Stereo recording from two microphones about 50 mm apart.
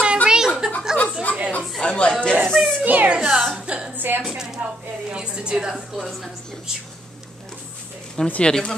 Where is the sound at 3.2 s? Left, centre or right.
Centre.